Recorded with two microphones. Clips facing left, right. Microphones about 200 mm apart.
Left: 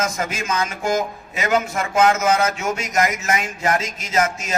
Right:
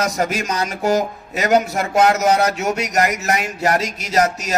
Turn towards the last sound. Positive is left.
turn(degrees=-40)  # may be behind; listen again after turning